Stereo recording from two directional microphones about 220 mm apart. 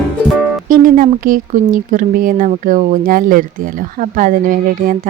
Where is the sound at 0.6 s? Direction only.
40° right (ahead or behind).